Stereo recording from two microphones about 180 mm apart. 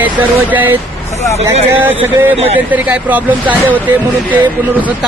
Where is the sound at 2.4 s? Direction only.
35° right (ahead or behind).